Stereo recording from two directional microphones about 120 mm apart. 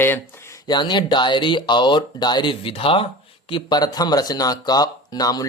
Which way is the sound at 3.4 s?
40° left (ahead or behind).